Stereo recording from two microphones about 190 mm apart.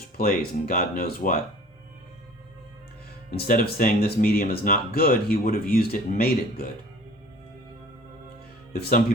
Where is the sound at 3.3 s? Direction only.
50° left (ahead or behind).